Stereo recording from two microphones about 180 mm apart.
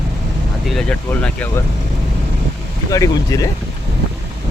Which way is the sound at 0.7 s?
5° left (ahead or behind).